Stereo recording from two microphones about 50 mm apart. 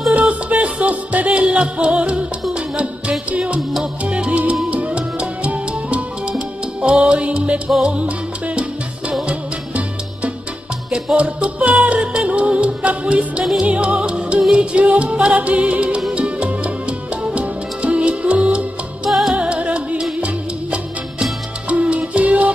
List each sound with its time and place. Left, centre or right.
0.1 s music: right
4.0 s salsa music: right
4.6 s music: right
7.8 s salsa music: right
9.2 s music: right
19.0 s music: centre
19.3 s music: right